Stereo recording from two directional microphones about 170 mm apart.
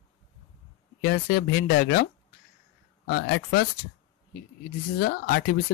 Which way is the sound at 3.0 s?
60° left (ahead or behind).